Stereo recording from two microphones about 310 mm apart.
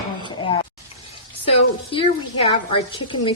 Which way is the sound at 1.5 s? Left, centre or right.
Centre.